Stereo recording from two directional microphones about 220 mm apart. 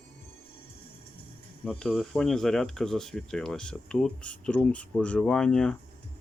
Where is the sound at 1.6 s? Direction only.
5° left (ahead or behind).